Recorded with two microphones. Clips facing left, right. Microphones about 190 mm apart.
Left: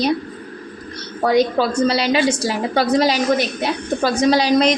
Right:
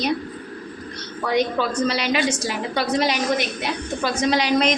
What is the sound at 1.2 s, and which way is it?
A woman's voice, 35° left (ahead or behind).